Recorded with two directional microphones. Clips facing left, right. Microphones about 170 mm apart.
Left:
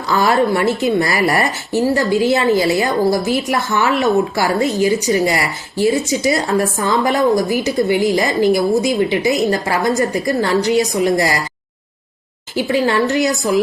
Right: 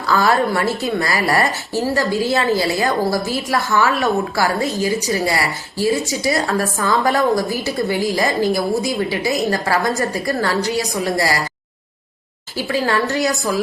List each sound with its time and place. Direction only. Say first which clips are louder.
0.1 s a woman's voice: left 2 dB; 20° left (ahead or behind)
12.5 s a woman's voice: left 4 dB; 20° left (ahead or behind)